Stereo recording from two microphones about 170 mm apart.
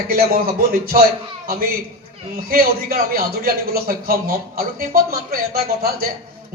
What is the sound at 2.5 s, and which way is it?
A man's voice, 60° right (ahead or behind).